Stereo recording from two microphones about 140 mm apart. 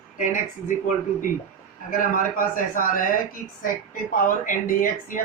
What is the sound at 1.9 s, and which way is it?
A man's voice, 80° left.